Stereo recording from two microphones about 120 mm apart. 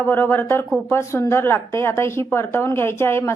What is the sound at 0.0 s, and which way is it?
A woman's voice, 20° left (ahead or behind).